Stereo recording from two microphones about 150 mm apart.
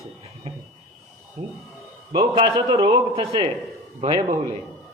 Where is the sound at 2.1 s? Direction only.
30° right (ahead or behind).